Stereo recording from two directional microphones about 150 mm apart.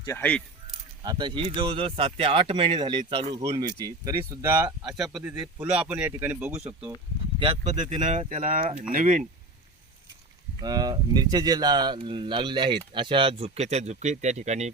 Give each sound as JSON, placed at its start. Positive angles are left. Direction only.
{"t": 0.2, "sound": "speech", "side_deg": 10}
{"t": 1.0, "sound": "speech", "side_deg": -30}
{"t": 7.3, "sound": "speech", "side_deg": -45}
{"t": 10.6, "sound": "speech", "side_deg": -25}